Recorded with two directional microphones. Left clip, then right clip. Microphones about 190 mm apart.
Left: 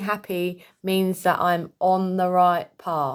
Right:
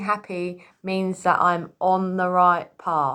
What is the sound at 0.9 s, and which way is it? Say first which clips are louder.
Speech: right 1 dB; 55° left (ahead or behind).